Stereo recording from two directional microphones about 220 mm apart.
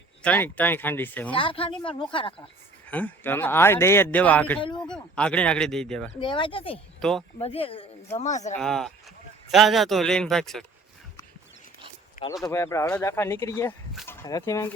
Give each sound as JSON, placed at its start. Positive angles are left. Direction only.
{"t": 0.2, "sound": "speech", "side_deg": 5}
{"t": 1.4, "sound": "speech", "side_deg": 25}
{"t": 2.8, "sound": "speech", "side_deg": 5}
{"t": 6.1, "sound": "speech", "side_deg": 20}
{"t": 7.0, "sound": "speech", "side_deg": 0}
{"t": 7.3, "sound": "speech", "side_deg": 25}
{"t": 8.5, "sound": "speech", "side_deg": 0}
{"t": 12.5, "sound": "speech", "side_deg": 10}